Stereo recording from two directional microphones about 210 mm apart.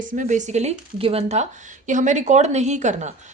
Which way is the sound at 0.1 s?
35° right (ahead or behind).